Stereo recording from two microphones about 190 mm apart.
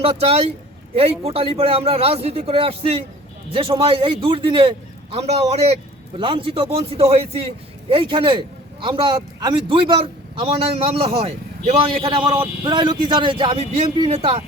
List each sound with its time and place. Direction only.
0.0 s a man's voice: 30° right (ahead or behind)